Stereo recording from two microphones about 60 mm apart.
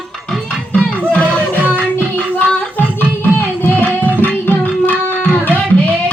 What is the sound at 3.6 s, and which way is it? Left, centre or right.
Music, left.